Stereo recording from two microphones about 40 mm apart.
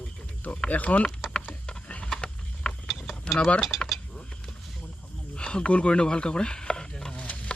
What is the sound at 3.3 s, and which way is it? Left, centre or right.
Speech, left.